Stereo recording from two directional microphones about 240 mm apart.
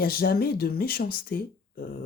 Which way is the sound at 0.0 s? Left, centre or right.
Left.